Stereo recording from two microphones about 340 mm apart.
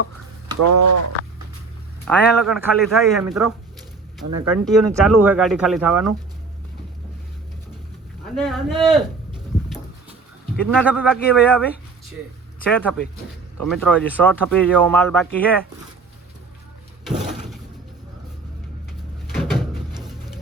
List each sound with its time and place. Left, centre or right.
2.0 s speech: centre
4.3 s speech: right
4.6 s speech: centre
8.4 s speech: centre
10.6 s speech: centre
12.7 s speech: centre
17.0 s a sound: centre
19.3 s door: centre